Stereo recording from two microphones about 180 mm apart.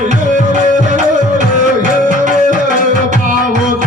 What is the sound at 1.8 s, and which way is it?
Music, 45° right (ahead or behind).